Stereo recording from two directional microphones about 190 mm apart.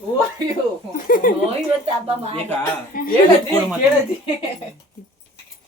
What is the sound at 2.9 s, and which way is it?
Speech, 50° left (ahead or behind).